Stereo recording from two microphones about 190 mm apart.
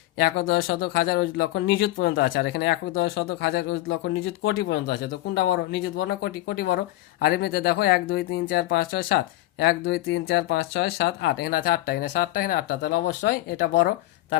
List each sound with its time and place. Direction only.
0.2 s speech: 55° left (ahead or behind)